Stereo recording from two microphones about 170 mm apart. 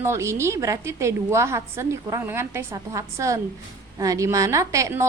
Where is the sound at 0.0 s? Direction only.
15° right (ahead or behind).